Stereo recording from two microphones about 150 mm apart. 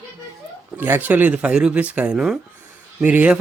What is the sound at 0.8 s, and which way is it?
Speech, 15° right (ahead or behind).